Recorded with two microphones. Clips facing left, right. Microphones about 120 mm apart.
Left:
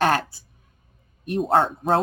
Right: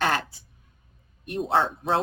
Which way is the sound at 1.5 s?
45° left (ahead or behind).